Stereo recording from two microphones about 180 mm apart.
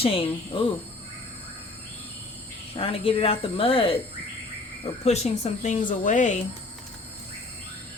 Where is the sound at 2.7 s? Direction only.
30° left (ahead or behind).